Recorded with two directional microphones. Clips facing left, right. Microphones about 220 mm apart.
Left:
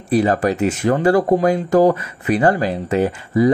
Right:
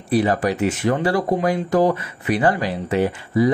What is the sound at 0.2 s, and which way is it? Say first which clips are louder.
Speech: left 3 dB; 40° left (ahead or behind).